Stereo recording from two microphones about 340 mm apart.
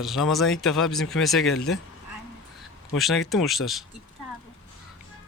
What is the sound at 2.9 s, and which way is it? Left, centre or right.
Speech, centre.